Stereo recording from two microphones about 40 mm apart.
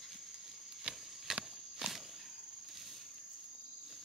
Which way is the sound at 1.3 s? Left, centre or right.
Centre.